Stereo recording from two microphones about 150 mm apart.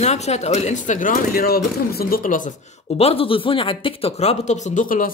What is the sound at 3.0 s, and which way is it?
Speech, 40° left (ahead or behind).